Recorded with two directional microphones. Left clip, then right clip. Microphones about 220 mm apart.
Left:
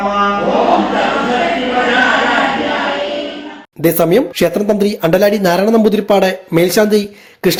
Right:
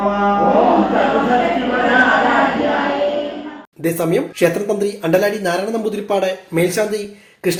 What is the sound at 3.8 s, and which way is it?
Speech, 45° left (ahead or behind).